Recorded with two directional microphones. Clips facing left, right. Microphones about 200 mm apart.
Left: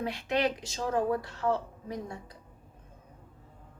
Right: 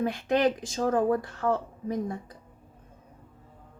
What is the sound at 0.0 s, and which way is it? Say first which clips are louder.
Speech: right 5 dB; 50° right (ahead or behind).